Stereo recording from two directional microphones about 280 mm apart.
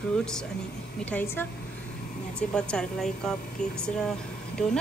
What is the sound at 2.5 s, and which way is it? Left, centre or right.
A woman's voice, centre.